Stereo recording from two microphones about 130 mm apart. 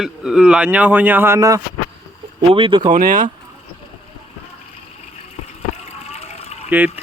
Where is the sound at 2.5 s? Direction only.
40° right (ahead or behind).